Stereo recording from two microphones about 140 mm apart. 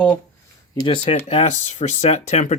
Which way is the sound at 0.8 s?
40° left (ahead or behind).